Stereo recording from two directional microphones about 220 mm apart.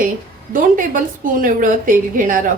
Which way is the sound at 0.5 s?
40° right (ahead or behind).